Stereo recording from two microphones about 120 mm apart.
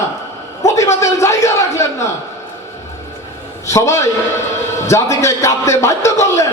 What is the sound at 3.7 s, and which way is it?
A man's voice, 25° left (ahead or behind).